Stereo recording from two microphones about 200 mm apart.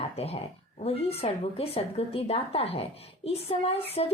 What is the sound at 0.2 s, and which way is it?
A woman's voice, 30° left (ahead or behind).